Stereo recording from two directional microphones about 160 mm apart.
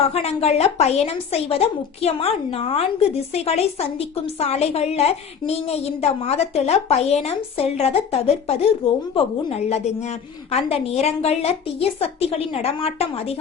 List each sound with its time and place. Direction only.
0.1 s a woman's voice: 40° left (ahead or behind)